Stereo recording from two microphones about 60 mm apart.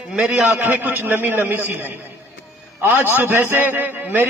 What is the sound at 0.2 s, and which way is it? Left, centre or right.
Speech, centre.